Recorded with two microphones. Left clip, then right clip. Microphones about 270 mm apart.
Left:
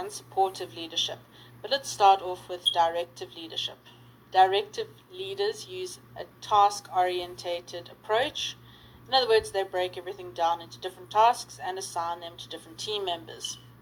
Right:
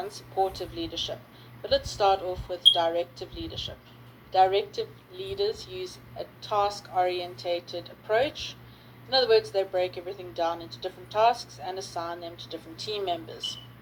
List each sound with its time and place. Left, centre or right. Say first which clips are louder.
0.0 s speech: left 1 dB; left